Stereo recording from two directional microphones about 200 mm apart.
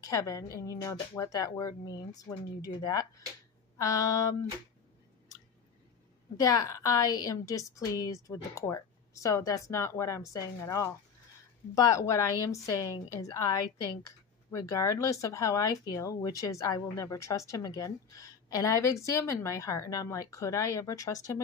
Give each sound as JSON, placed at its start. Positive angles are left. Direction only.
{"t": 0.0, "sound": "a woman's voice", "side_deg": 15}
{"t": 6.3, "sound": "a woman's voice", "side_deg": 20}